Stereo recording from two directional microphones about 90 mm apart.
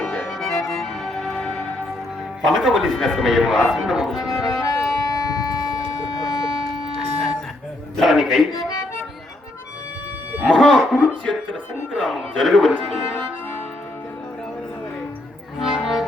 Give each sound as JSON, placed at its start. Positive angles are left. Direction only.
{"t": 0.3, "sound": "music", "side_deg": 0}
{"t": 2.5, "sound": "speech", "side_deg": -5}
{"t": 5.1, "sound": "civil defense siren", "side_deg": 40}
{"t": 7.9, "sound": "a sound", "side_deg": -5}
{"t": 10.4, "sound": "speech", "side_deg": 0}
{"t": 15.5, "sound": "music", "side_deg": 0}